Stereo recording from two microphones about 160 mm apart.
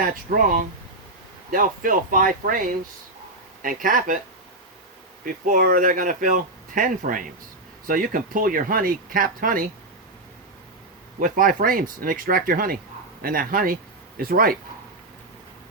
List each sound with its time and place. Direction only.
0.0 s speech: 60° right (ahead or behind)
5.2 s speech: 60° right (ahead or behind)
11.2 s speech: 60° right (ahead or behind)